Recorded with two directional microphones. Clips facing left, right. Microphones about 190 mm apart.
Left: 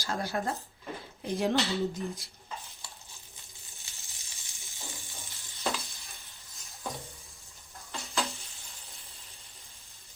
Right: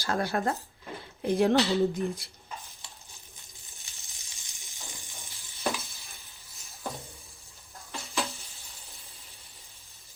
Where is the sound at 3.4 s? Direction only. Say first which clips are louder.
Even; 15° right (ahead or behind).